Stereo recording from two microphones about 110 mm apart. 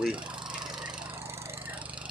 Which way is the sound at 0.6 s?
5° right (ahead or behind).